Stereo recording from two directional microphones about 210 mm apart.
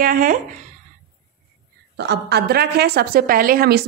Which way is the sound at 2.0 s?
55° right (ahead or behind).